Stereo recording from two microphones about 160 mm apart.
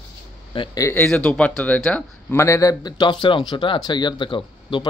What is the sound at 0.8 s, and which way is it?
Speech, 15° left (ahead or behind).